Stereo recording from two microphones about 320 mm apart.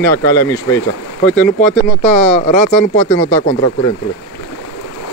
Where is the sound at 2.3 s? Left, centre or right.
Left.